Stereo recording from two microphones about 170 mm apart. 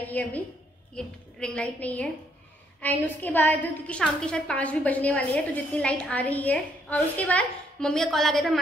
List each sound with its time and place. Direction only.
0.0 s a woman's voice: 10° left (ahead or behind)